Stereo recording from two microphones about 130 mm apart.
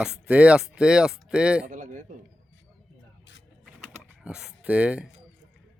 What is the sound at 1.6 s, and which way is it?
Speech, 80° right.